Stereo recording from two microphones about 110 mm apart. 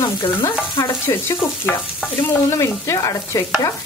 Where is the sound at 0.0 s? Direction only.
45° left (ahead or behind).